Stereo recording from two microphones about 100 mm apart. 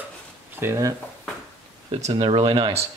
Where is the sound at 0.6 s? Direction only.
30° right (ahead or behind).